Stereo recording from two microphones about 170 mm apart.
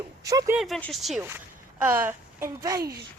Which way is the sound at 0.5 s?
Centre (ahead or behind).